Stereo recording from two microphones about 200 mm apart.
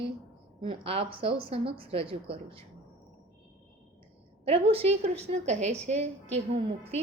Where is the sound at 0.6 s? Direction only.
25° right (ahead or behind).